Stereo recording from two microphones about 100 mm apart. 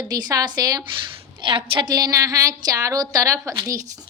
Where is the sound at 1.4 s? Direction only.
55° right (ahead or behind); by 3.6 s 30° right (ahead or behind).